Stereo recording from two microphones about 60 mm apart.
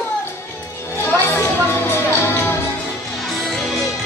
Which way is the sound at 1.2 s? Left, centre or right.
Left.